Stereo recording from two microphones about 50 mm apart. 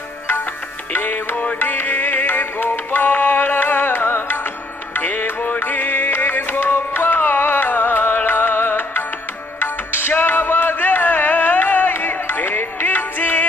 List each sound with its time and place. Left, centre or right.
0.9 s music: left